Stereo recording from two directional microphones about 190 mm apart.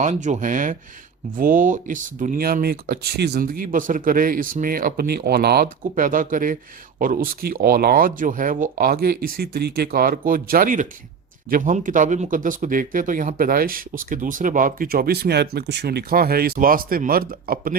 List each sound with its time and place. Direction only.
0.0 s speech: 40° right (ahead or behind); by 5.7 s 55° right (ahead or behind)
5.9 s speech: 45° right (ahead or behind)